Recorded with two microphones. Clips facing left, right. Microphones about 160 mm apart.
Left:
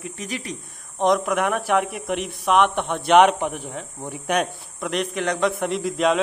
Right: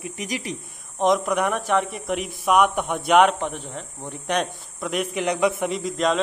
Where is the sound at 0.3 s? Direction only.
10° right (ahead or behind).